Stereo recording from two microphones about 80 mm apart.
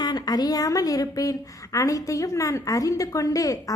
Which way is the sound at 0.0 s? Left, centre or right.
Left.